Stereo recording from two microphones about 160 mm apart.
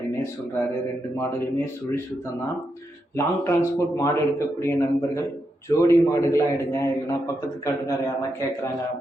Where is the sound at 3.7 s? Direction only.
20° left (ahead or behind).